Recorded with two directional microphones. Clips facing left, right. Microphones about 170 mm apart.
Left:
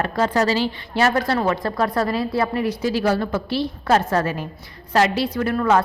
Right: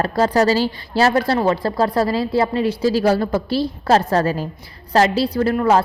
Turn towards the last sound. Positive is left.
turn(degrees=-35)  # may be behind; listen again after turning